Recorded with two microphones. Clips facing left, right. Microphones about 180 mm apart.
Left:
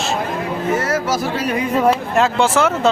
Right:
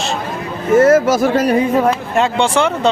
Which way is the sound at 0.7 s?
50° right (ahead or behind).